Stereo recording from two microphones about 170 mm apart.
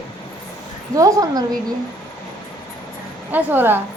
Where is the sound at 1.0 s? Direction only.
20° right (ahead or behind).